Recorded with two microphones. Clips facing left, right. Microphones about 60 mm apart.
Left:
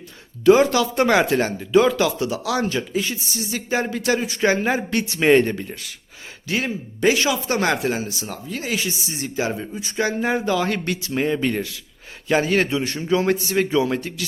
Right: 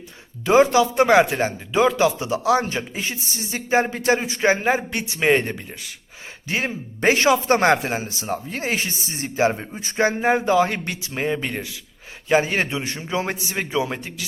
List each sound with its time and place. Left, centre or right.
0.4 s speech: right
6.5 s speech: right
7.0 s a man's voice: right; by 14.3 s centre